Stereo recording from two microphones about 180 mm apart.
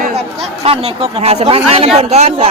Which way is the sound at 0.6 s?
35° right (ahead or behind).